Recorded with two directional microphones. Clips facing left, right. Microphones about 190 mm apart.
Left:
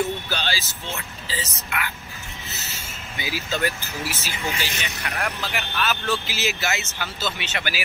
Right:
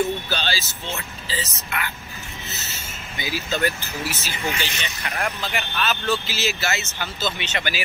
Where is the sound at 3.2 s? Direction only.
10° left (ahead or behind).